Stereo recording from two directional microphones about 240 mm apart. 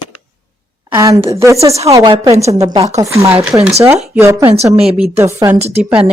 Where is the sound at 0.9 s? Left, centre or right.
Centre.